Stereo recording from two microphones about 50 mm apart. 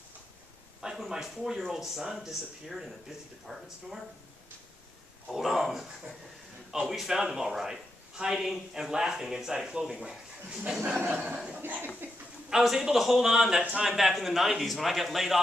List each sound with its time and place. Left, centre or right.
0.7 s a man's voice: centre
5.3 s a man's voice: centre
11.6 s speech: right
12.4 s a man's voice: centre